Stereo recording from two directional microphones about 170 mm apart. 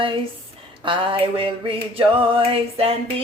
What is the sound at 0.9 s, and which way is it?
Music, 30° right (ahead or behind).